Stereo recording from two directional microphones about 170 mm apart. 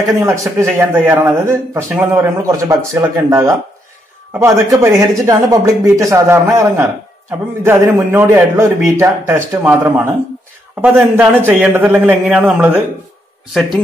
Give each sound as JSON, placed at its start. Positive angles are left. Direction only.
{"t": 0.1, "sound": "a man's voice", "side_deg": -20}